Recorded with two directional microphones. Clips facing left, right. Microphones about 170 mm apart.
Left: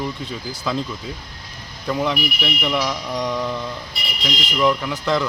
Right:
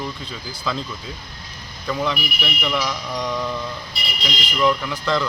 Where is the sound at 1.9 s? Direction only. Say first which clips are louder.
Left 2 dB; 10° left (ahead or behind).